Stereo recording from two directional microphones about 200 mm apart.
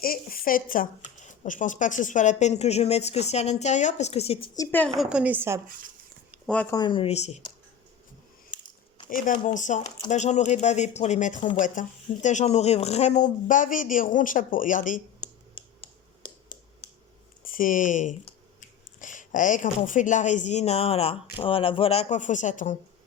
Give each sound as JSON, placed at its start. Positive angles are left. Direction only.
{"t": 0.0, "sound": "speech", "side_deg": 45}
{"t": 4.5, "sound": "a woman's voice", "side_deg": 15}
{"t": 5.0, "sound": "speech", "side_deg": -5}
{"t": 6.3, "sound": "speech", "side_deg": 5}
{"t": 6.7, "sound": "speech", "side_deg": 25}
{"t": 9.0, "sound": "speech", "side_deg": 40}
{"t": 15.2, "sound": "a sound", "side_deg": 25}
{"t": 17.4, "sound": "speech", "side_deg": 45}